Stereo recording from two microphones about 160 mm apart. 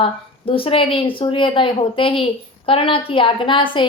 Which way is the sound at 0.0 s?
35° left (ahead or behind).